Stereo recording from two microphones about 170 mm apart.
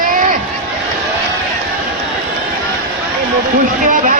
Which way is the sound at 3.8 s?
50° right (ahead or behind).